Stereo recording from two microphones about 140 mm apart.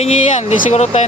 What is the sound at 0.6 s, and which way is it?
Speech, 55° left (ahead or behind).